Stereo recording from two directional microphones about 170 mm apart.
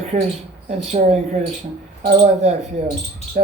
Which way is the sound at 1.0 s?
45° right (ahead or behind).